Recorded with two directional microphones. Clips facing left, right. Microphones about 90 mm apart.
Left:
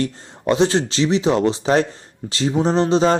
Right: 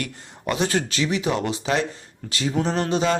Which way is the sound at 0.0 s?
30° left (ahead or behind).